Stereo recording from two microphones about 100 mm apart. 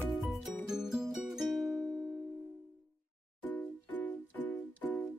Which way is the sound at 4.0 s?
15° left (ahead or behind).